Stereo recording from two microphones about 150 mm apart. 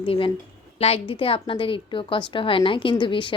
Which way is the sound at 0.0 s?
40° left (ahead or behind).